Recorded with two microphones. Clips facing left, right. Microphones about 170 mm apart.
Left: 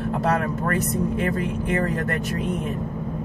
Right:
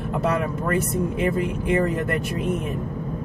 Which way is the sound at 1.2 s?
10° right (ahead or behind).